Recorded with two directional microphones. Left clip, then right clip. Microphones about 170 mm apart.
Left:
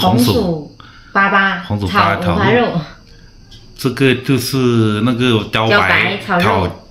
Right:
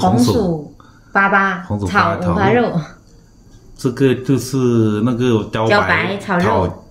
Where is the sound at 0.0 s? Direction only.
5° left (ahead or behind).